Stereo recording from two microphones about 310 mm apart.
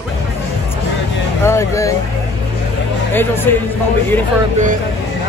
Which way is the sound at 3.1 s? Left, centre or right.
Centre.